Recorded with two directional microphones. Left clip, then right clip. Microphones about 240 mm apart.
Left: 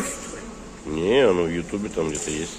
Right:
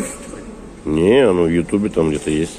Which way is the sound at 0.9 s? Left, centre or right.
Right.